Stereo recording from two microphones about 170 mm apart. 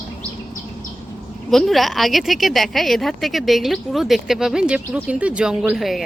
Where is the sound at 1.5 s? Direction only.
Centre (ahead or behind).